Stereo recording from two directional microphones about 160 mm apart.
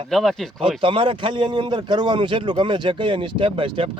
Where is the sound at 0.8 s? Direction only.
35° right (ahead or behind).